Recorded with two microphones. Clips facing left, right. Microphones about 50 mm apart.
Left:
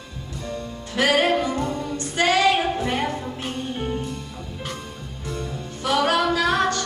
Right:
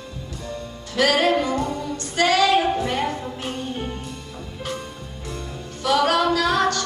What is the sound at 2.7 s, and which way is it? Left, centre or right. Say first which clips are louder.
Music: right 1 dB; left.